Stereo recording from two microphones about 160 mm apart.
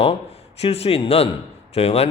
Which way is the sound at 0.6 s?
40° left (ahead or behind).